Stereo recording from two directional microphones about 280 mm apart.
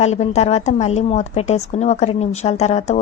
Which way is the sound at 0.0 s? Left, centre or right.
Left.